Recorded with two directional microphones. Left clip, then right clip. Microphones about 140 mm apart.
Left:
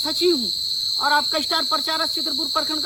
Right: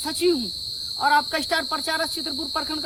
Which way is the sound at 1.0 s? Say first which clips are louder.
Right 1 dB; 25° right (ahead or behind).